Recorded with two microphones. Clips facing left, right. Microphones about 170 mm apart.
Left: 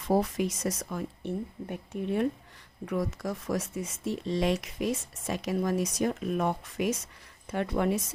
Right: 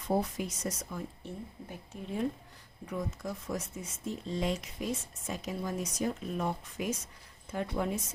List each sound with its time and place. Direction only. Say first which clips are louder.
0.0 s speech: left 5 dB; 85° left; by 2.2 s 65° left (ahead or behind)
2.8 s speech: left 6 dB; 80° left